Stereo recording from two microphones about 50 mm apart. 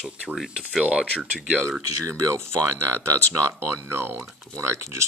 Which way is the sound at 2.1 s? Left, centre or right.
Right.